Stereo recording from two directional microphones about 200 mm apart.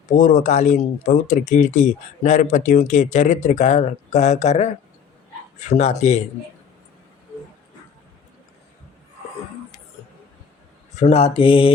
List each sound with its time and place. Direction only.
0.1 s speech: 40° left (ahead or behind)
11.0 s speech: 30° left (ahead or behind)